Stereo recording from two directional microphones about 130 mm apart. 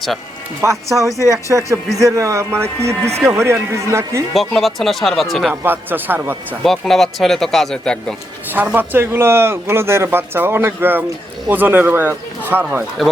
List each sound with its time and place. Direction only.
0.6 s a man's voice: 25° right (ahead or behind)
4.4 s speech: centre (ahead or behind)
5.5 s a man's voice: 15° right (ahead or behind)
6.6 s speech: centre (ahead or behind)
8.5 s a man's voice: 15° right (ahead or behind)